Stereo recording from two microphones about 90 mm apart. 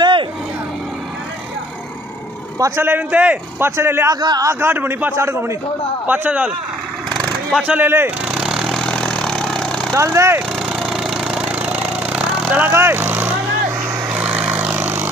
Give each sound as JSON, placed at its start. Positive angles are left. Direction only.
{"t": 0.0, "sound": "vehicle", "side_deg": -65}
{"t": 2.8, "sound": "a man's voice", "side_deg": -15}
{"t": 3.6, "sound": "a man's voice", "side_deg": -30}
{"t": 4.1, "sound": "a man's voice", "side_deg": -50}
{"t": 4.5, "sound": "a man's voice", "side_deg": -25}
{"t": 6.0, "sound": "a man's voice", "side_deg": -20}
{"t": 7.5, "sound": "a man's voice", "side_deg": -15}
{"t": 8.3, "sound": "a sound", "side_deg": -10}
{"t": 8.8, "sound": "vehicle", "side_deg": 10}
{"t": 9.9, "sound": "speech", "side_deg": -35}
{"t": 10.6, "sound": "a sound", "side_deg": -5}
{"t": 12.7, "sound": "speech", "side_deg": -25}
{"t": 14.0, "sound": "vehicle", "side_deg": -15}